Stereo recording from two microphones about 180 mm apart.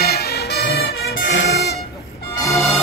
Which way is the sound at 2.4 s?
15° left (ahead or behind).